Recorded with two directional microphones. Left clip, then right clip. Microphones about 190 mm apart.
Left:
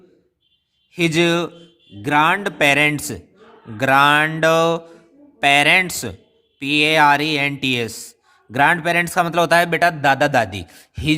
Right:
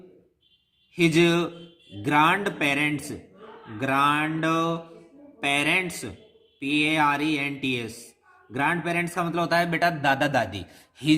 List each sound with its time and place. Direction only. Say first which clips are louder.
0.9 s a man's voice: left 4 dB; 55° left (ahead or behind); by 11.2 s 35° left (ahead or behind)